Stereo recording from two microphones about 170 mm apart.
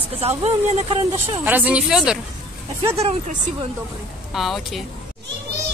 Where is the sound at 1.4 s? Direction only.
10° right (ahead or behind).